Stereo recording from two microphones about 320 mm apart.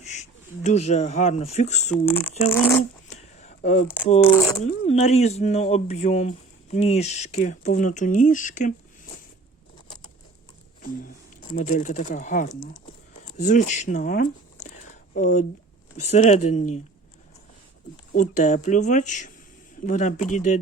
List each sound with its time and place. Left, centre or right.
0.0 s speech: left
2.0 s speech: centre
3.1 s a sound: left
4.2 s speech: centre
4.6 s speech: left
11.0 s speech: left
18.1 s speech: left